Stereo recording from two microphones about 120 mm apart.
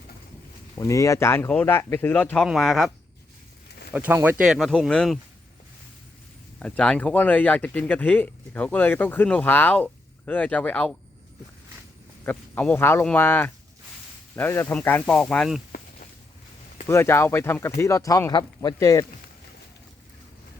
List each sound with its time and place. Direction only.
0.8 s speech: 25° left (ahead or behind)
2.4 s speech: centre (ahead or behind)
3.9 s speech: 15° right (ahead or behind)
4.4 s speech: centre (ahead or behind)
6.6 s speech: 10° left (ahead or behind)
12.2 s speech: 15° left (ahead or behind)
16.8 s speech: 20° left (ahead or behind)